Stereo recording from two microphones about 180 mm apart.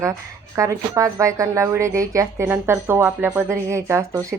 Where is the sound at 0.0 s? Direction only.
15° right (ahead or behind).